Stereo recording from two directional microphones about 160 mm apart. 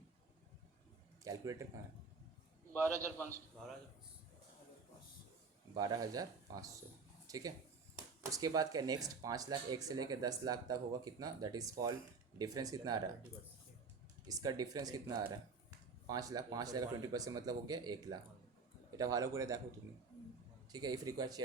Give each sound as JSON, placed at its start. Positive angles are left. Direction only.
{"t": 1.2, "sound": "speech", "side_deg": -20}
{"t": 5.7, "sound": "speech", "side_deg": -25}
{"t": 14.3, "sound": "speech", "side_deg": -25}
{"t": 20.7, "sound": "speech", "side_deg": -25}